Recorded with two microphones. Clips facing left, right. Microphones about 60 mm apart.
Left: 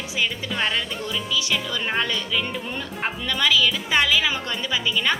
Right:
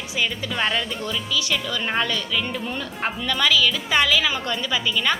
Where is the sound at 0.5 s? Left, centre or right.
Centre.